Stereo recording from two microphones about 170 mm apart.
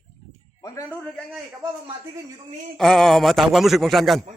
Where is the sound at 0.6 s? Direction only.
15° left (ahead or behind).